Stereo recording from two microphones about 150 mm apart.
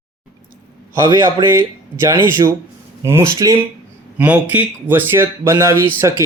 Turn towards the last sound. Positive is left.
turn(degrees=-15)  # may be behind; listen again after turning